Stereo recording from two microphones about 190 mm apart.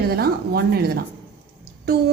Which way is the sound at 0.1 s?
55° right (ahead or behind).